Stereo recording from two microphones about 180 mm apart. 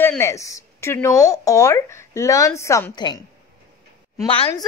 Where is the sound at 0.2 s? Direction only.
15° left (ahead or behind).